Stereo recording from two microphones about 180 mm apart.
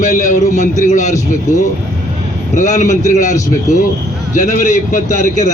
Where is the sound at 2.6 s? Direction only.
40° left (ahead or behind).